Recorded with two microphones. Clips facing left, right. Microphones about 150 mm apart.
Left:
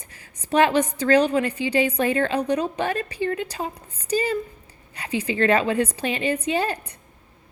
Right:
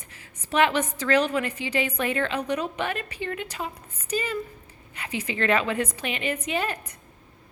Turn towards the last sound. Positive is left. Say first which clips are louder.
# left 4 dB
turn(degrees=35)  # may be behind; listen again after turning